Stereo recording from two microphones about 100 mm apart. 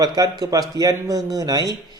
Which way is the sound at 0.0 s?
40° right (ahead or behind).